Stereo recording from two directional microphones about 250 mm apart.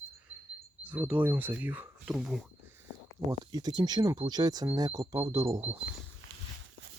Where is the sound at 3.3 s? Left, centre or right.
Centre.